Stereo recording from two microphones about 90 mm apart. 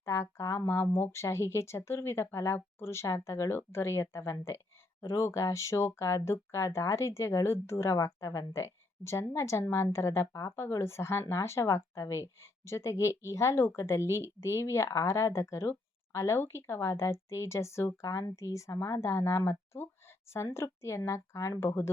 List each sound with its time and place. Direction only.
0.0 s speech: 30° left (ahead or behind)